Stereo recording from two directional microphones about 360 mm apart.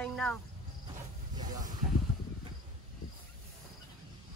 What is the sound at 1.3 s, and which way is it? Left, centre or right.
Snake, right.